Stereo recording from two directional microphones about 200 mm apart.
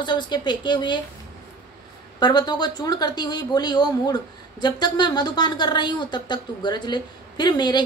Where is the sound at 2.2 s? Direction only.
20° left (ahead or behind).